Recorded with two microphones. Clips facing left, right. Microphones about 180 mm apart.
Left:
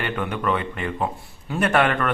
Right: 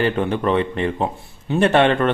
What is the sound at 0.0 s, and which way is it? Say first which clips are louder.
A man's voice: right 6 dB; 30° right (ahead or behind).